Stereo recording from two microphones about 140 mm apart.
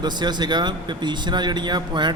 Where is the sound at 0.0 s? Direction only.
30° right (ahead or behind).